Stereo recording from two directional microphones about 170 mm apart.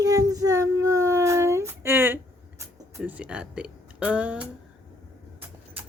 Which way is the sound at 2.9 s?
10° right (ahead or behind).